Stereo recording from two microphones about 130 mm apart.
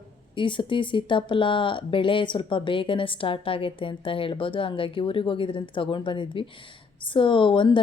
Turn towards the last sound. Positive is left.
turn(degrees=40)  # may be behind; listen again after turning